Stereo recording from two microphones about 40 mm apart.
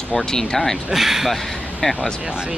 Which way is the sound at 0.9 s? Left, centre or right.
Centre.